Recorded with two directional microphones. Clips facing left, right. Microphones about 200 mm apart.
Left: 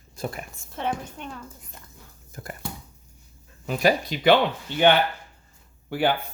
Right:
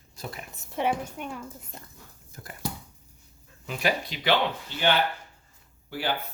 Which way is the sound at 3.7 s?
40° left (ahead or behind).